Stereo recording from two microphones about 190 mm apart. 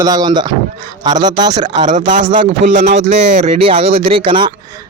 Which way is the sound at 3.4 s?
30° right (ahead or behind).